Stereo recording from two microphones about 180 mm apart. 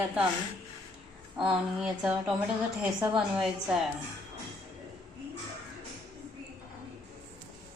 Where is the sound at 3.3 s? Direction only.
Centre (ahead or behind).